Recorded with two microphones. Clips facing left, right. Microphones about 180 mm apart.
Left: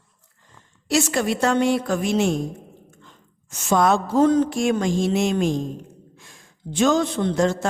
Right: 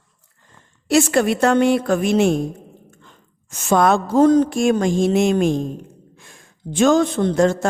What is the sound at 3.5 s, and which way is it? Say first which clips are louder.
Speech: right 3 dB; 55° right (ahead or behind).